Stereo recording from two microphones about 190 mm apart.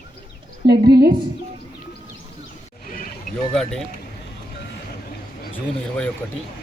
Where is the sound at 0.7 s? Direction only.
55° right (ahead or behind).